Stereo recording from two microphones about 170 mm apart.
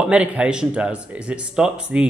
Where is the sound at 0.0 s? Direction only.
5° right (ahead or behind).